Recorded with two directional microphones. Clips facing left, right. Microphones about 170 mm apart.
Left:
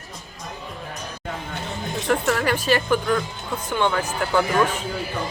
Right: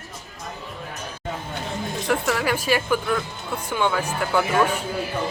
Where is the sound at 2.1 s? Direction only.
10° right (ahead or behind).